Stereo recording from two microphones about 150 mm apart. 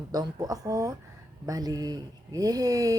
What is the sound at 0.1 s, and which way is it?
Speech, 25° right (ahead or behind).